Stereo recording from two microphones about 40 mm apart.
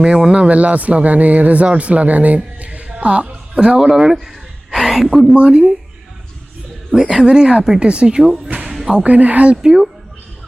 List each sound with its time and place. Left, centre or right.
0.0 s a woman's voice: right
3.8 s a man's voice: centre
5.3 s speech: right
6.9 s speech: centre
9.0 s speech: right
9.6 s speech: centre